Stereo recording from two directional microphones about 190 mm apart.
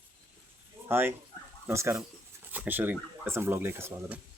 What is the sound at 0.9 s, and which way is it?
Speech, 10° right (ahead or behind).